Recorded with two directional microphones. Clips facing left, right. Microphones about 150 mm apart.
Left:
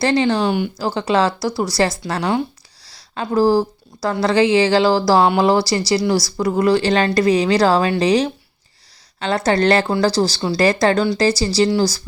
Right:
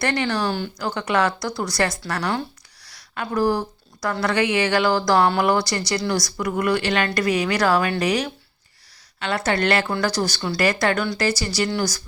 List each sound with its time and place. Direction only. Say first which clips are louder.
0.0 s speech: left 6 dB; 25° left (ahead or behind)